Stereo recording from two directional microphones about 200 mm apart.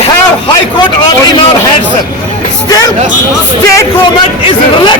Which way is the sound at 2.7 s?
20° left (ahead or behind).